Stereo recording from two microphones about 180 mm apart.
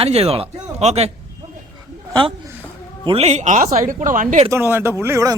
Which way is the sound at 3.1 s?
35° right (ahead or behind).